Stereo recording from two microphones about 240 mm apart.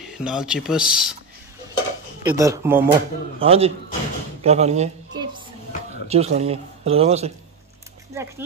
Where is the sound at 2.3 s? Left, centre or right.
Centre.